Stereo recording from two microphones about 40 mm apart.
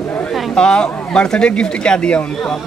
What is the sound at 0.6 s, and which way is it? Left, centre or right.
Speech, left.